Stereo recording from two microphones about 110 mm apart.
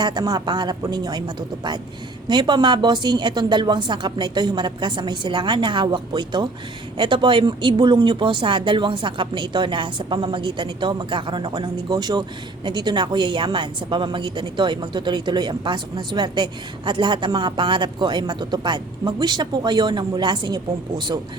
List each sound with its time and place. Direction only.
0.0 s a woman's voice: 40° right (ahead or behind)